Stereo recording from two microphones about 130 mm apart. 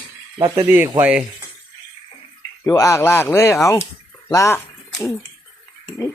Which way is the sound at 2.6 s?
25° left (ahead or behind).